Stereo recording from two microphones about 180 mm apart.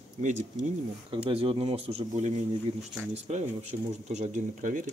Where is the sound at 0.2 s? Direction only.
40° right (ahead or behind).